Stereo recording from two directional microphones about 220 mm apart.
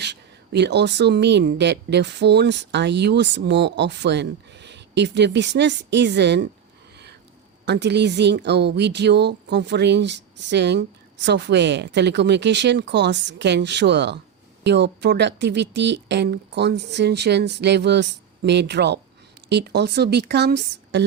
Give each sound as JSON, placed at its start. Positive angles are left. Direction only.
{"t": 0.0, "sound": "speech", "side_deg": -50}
{"t": 7.6, "sound": "speech", "side_deg": -50}